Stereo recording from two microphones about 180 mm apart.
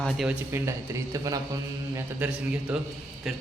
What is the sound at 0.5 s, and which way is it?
A man's voice, 15° right (ahead or behind).